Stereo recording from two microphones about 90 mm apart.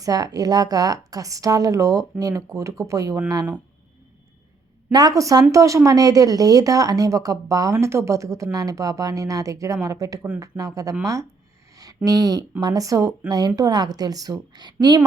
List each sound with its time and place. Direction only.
0.0 s speech: 45° right (ahead or behind)
4.9 s speech: 45° right (ahead or behind)